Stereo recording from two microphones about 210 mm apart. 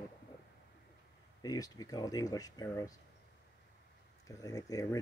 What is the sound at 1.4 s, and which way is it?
Speech, 15° left (ahead or behind).